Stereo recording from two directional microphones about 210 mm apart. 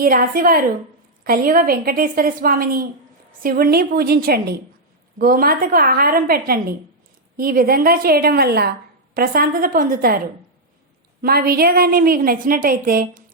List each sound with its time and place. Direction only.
0.0 s a woman's voice: 40° right (ahead or behind)
11.2 s a woman's voice: 45° right (ahead or behind)